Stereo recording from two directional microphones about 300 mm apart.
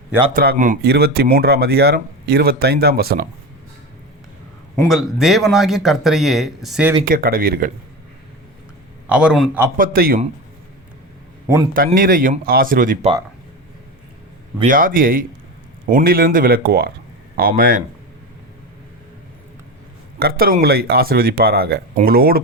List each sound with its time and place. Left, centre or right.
0.3 s speech: right
4.9 s speech: centre
7.0 s speech: right
9.0 s speech: centre
9.7 s speech: right
11.7 s speech: right
14.6 s speech: right
20.1 s speech: right